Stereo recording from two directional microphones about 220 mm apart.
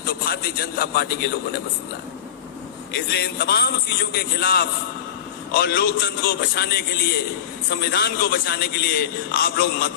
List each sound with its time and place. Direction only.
0.0 s a man's voice: 45° left (ahead or behind)
2.9 s a man's voice: 45° left (ahead or behind)